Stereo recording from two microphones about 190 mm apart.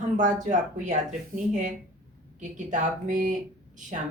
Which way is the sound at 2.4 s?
40° right (ahead or behind).